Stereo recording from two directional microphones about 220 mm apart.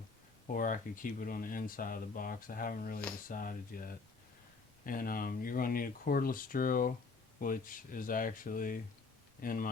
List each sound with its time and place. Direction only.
0.5 s speech: 40° left (ahead or behind)